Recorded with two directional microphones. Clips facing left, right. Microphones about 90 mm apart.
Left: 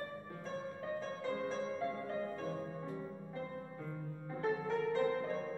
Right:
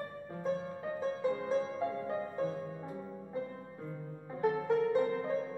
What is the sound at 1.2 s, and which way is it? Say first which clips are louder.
Music: right 7 dB; 20° right (ahead or behind).